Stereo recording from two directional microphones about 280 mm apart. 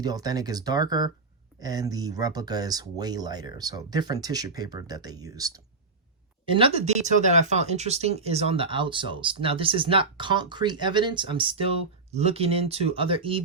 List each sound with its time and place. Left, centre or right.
0.0 s speech: centre